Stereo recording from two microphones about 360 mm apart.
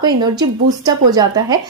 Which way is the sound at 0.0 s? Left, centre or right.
Centre.